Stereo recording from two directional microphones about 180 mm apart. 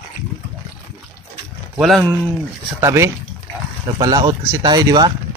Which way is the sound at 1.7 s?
Centre (ahead or behind).